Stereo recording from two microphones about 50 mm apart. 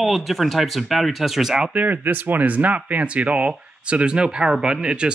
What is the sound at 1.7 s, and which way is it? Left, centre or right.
Speech, right.